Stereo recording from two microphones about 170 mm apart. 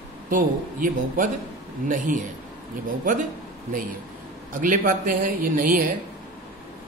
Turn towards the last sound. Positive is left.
turn(degrees=-55)  # may be behind; listen again after turning